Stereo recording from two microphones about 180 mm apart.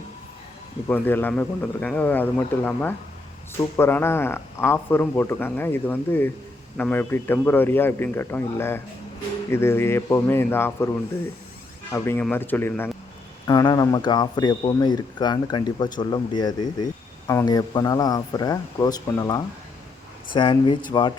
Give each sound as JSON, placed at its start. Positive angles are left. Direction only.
{"t": 0.9, "sound": "speech", "side_deg": 10}
{"t": 11.9, "sound": "speech", "side_deg": 10}